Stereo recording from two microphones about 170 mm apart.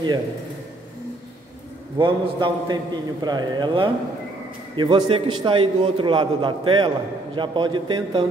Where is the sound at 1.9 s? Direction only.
30° right (ahead or behind).